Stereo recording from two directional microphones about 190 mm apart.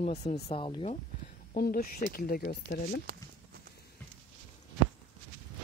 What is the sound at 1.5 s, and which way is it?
Speech, 50° left (ahead or behind).